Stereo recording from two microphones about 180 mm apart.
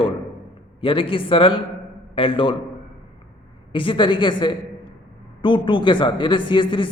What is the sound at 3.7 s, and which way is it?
A man's voice, 30° left (ahead or behind).